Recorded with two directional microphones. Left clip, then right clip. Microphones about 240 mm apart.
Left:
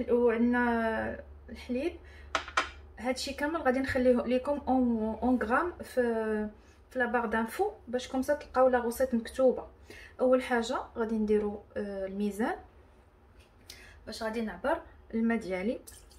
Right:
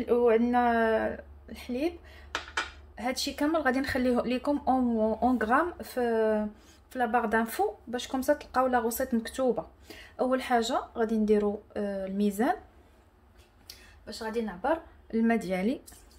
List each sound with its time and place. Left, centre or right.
0.0 s speech: right
3.0 s speech: right
14.0 s a woman's voice: right
15.0 s speech: right